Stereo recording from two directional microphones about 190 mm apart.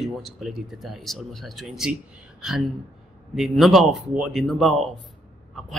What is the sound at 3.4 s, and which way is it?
Speech, centre (ahead or behind).